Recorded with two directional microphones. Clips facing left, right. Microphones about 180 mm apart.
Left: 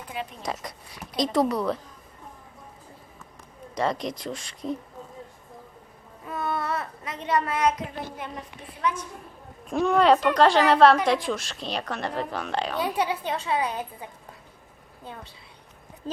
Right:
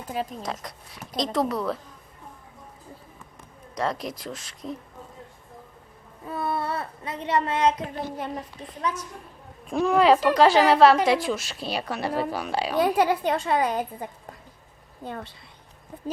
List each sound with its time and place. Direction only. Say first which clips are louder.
0.1 s a woman's voice: right 5 dB; 40° right (ahead or behind)
0.4 s a woman's voice: left 1 dB; centre (ahead or behind)
3.8 s a woman's voice: left 2 dB; centre (ahead or behind)
6.2 s a child's voice: right 1 dB; 30° right (ahead or behind)
8.8 s a woman's voice: left 1 dB; 40° right (ahead or behind)
9.6 s a woman's voice: right 1 dB; centre (ahead or behind)
12.8 s a woman's voice: right 9 dB; 50° right (ahead or behind)